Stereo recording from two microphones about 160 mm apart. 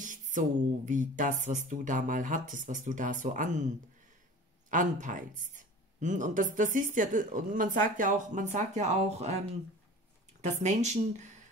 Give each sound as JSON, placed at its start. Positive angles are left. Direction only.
{"t": 0.0, "sound": "speech", "side_deg": -55}
{"t": 10.4, "sound": "speech", "side_deg": -45}